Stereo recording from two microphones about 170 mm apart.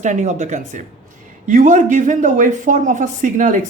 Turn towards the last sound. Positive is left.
turn(degrees=-50)  # may be behind; listen again after turning